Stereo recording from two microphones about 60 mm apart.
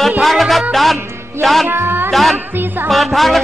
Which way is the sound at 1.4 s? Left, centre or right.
Centre.